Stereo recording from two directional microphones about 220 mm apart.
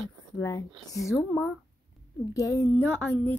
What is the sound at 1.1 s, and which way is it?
Speech, centre (ahead or behind).